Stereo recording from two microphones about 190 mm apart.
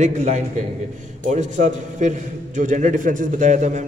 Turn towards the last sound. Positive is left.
turn(degrees=-40)  # may be behind; listen again after turning